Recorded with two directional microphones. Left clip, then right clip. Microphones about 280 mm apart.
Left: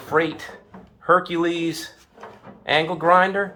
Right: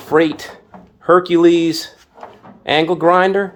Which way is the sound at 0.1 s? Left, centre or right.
Right.